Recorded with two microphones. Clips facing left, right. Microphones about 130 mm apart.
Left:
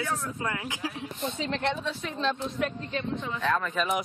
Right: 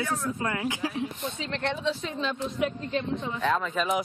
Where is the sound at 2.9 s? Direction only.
30° right (ahead or behind).